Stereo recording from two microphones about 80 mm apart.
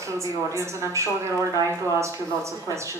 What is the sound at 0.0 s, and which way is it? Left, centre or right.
A woman's voice, right.